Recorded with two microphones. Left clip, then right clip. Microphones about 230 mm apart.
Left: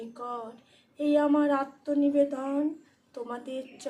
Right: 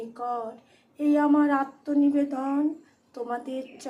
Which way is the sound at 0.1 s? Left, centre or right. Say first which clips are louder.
Right 7 dB; centre.